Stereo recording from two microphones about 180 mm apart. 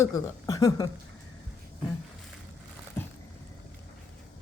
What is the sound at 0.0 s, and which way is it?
Speech, 20° left (ahead or behind).